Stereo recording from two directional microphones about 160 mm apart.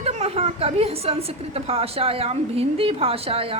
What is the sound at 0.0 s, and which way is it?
A woman's voice, 40° right (ahead or behind).